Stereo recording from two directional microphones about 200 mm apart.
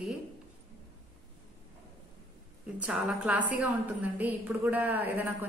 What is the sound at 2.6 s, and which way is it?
A woman's voice, 5° right (ahead or behind).